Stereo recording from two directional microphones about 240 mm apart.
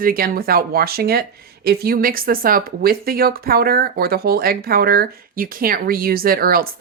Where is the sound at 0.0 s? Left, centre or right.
Right.